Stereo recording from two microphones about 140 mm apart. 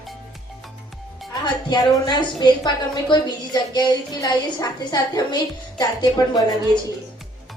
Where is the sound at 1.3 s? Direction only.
30° left (ahead or behind).